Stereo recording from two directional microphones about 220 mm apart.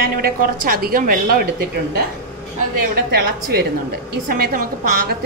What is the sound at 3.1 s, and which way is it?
A woman's voice, 45° right (ahead or behind).